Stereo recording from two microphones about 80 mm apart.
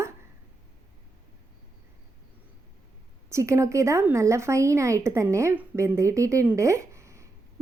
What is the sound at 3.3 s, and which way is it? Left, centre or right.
A woman's voice, right.